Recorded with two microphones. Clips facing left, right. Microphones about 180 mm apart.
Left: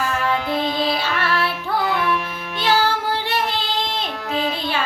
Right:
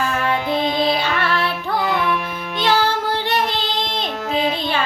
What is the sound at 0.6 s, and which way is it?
Music, 20° right (ahead or behind).